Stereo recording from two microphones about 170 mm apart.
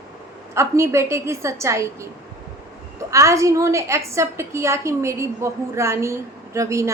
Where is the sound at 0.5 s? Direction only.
15° right (ahead or behind).